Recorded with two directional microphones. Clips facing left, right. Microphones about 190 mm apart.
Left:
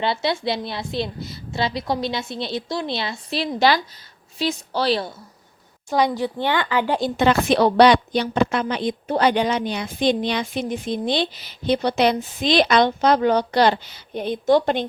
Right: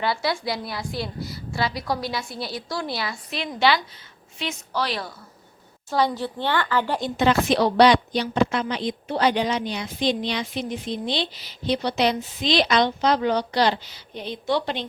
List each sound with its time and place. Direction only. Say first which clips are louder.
0.0 s a woman's voice: left 3 dB; 25° left (ahead or behind)
5.9 s speech: left 3 dB; 15° left (ahead or behind)
7.2 s a woman's voice: left 2 dB; 55° left (ahead or behind)